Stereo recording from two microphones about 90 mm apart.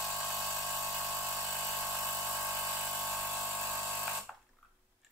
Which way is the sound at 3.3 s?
25° right (ahead or behind).